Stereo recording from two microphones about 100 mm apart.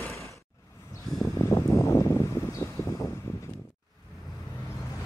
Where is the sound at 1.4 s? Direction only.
30° left (ahead or behind).